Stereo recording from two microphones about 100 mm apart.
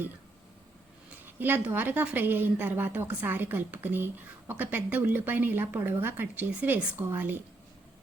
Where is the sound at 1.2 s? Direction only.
20° right (ahead or behind).